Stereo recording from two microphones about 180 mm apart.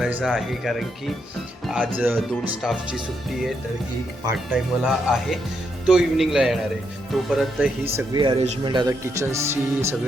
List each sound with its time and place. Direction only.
0.0 s speech: 5° right (ahead or behind)
4.3 s speech: centre (ahead or behind)
7.9 s speech: 25° right (ahead or behind)